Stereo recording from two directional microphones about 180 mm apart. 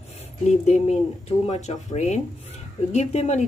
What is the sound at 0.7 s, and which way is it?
Speech, 35° left (ahead or behind).